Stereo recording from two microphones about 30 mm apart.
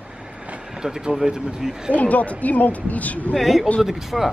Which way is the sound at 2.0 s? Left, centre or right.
Left.